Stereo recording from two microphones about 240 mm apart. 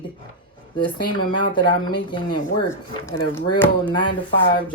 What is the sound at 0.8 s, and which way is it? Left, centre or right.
Speech, centre.